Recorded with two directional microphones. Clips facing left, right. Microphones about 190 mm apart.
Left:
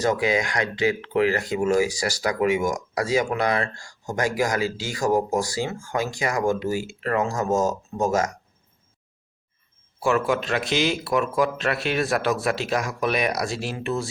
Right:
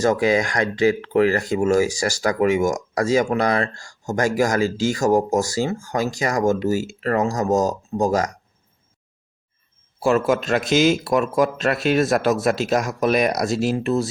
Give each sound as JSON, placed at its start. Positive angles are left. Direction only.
{"t": 0.0, "sound": "speech", "side_deg": -45}
{"t": 10.0, "sound": "speech", "side_deg": -40}